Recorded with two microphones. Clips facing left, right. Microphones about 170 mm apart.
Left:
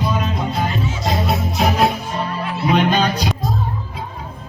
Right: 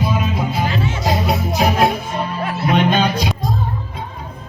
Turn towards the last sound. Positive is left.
turn(degrees=0)  # may be behind; listen again after turning